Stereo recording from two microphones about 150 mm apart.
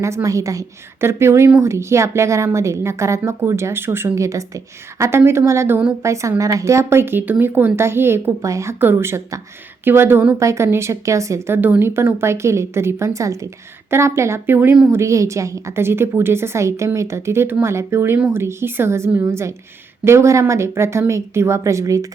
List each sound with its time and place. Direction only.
0.0 s a woman's voice: 20° right (ahead or behind)